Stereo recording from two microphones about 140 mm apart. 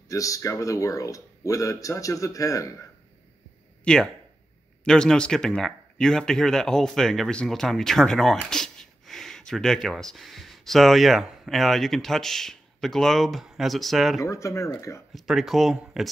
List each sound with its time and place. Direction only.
0.1 s speech: 25° left (ahead or behind)
3.8 s speech: 5° left (ahead or behind)
14.2 s speech: 20° left (ahead or behind)
15.1 s speech: centre (ahead or behind)